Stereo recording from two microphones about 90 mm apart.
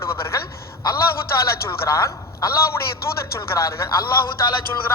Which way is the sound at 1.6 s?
35° left (ahead or behind).